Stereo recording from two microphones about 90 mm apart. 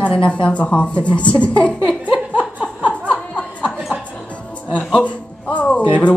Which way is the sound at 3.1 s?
10° left (ahead or behind).